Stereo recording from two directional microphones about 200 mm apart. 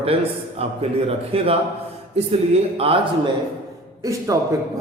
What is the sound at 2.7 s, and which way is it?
Speech, 30° right (ahead or behind).